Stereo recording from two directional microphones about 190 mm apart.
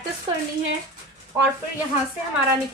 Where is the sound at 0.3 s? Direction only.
25° right (ahead or behind).